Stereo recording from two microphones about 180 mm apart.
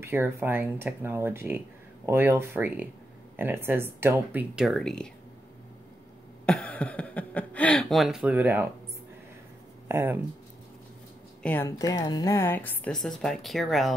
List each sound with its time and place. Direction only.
0.0 s speech: 10° right (ahead or behind)
6.4 s speech: 5° left (ahead or behind); by 8.6 s 10° right (ahead or behind)
9.8 s speech: 10° right (ahead or behind)
11.4 s a woman's voice: 15° left (ahead or behind)